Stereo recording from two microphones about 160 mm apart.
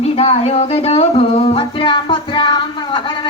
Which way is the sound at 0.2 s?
40° left (ahead or behind).